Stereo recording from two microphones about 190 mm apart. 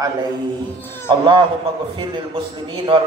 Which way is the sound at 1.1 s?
25° right (ahead or behind).